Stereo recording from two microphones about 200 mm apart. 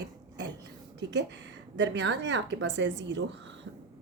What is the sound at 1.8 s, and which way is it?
Speech, 60° right (ahead or behind).